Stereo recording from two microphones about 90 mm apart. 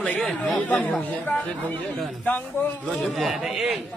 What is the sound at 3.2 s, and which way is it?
Speech, centre (ahead or behind).